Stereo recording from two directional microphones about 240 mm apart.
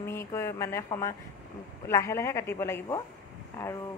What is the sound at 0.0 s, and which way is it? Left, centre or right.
Speech, centre.